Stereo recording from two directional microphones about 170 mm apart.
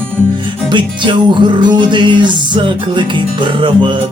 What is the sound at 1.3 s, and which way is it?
Music, 30° right (ahead or behind).